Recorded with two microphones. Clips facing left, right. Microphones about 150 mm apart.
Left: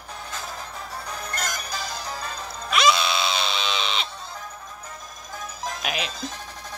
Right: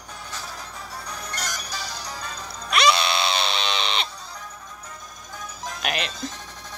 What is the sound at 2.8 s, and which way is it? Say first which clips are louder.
Screaming: even; 65° right (ahead or behind).